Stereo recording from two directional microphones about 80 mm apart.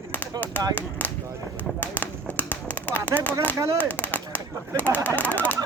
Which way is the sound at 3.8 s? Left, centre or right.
Left.